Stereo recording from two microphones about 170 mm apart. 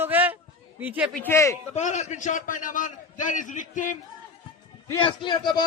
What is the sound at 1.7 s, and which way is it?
A man's voice, 45° left (ahead or behind).